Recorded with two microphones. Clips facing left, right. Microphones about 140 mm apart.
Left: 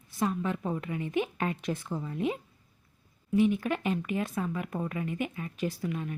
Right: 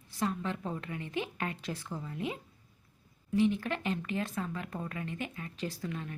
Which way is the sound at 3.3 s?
15° left (ahead or behind).